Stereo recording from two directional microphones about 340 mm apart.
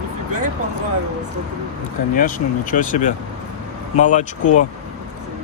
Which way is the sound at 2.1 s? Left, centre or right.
Left.